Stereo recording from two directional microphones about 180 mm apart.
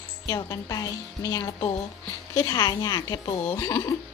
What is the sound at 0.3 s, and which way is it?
A woman's voice, 20° left (ahead or behind).